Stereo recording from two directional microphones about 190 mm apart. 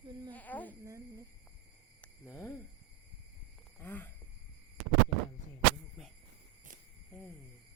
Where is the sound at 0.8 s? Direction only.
15° right (ahead or behind).